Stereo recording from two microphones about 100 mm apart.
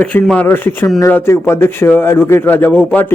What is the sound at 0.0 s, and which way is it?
A man's voice, 15° left (ahead or behind).